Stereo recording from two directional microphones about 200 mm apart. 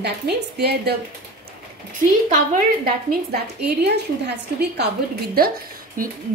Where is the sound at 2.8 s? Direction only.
55° right (ahead or behind).